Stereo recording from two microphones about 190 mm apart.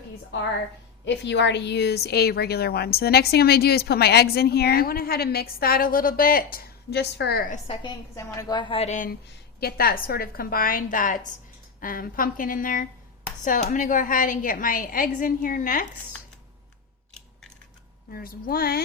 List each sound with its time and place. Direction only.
1.0 s a woman's voice: 65° left (ahead or behind)
7.5 s a woman's voice: 25° left (ahead or behind)
8.1 s a woman's voice: 15° left (ahead or behind); by 9.1 s 40° left (ahead or behind)
9.6 s a woman's voice: 55° left (ahead or behind)
18.1 s a woman's voice: 50° left (ahead or behind)